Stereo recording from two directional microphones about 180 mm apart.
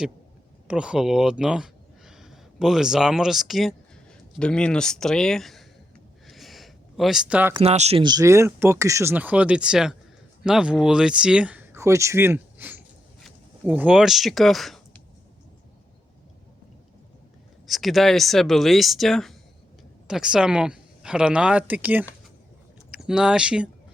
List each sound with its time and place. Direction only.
0.7 s speech: 5° right (ahead or behind)
6.2 s a sound: centre (ahead or behind)
7.6 s speech: 35° right (ahead or behind)
8.0 s speech: 20° right (ahead or behind); by 15.0 s centre (ahead or behind)
17.7 s speech: centre (ahead or behind)